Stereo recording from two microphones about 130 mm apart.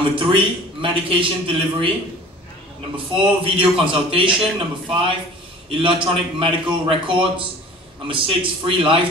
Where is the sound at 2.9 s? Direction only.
45° right (ahead or behind).